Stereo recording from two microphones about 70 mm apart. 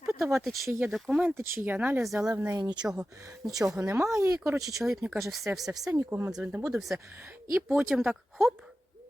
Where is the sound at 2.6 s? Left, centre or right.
Right.